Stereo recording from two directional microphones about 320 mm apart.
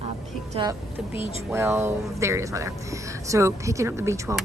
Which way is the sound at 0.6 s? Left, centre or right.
Centre.